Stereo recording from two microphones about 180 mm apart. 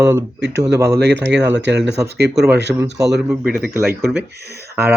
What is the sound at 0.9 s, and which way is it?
Speech, 65° right (ahead or behind).